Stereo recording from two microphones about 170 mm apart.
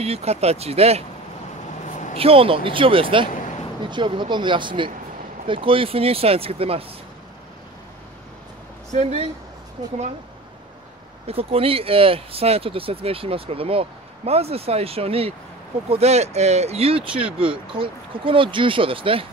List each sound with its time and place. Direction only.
0.0 s speech: 40° right (ahead or behind)
1.9 s vehicle: 45° left (ahead or behind)
2.1 s speech: 35° right (ahead or behind)
8.9 s speech: 40° right (ahead or behind)
11.2 s speech: 35° right (ahead or behind)